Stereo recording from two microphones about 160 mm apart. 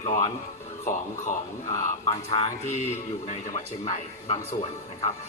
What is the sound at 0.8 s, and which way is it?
Speech, 55° left (ahead or behind).